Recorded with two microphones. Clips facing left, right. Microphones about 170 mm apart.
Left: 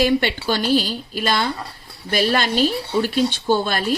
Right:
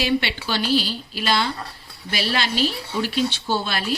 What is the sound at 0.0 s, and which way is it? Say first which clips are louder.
A man's voice: left 5 dB; 45° left (ahead or behind).